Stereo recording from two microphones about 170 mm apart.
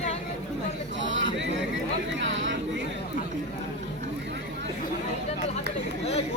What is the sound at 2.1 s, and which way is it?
Chatter, 90° right.